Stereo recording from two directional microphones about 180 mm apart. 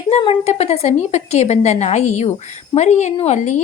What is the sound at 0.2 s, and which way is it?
A woman's voice, 35° left (ahead or behind).